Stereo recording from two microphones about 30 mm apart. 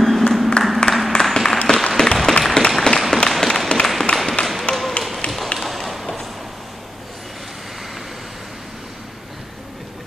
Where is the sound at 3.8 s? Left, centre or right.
Centre.